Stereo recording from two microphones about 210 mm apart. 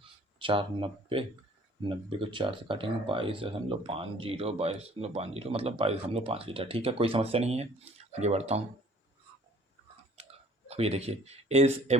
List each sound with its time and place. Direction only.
0.0 s a sound: 25° right (ahead or behind)
2.0 s speech: 25° right (ahead or behind)
10.7 s speech: 30° right (ahead or behind)